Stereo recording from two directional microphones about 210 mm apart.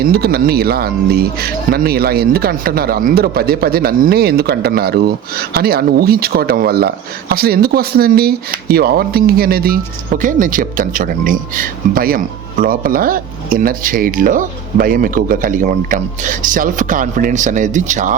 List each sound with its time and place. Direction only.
0.0 s speech: 45° right (ahead or behind)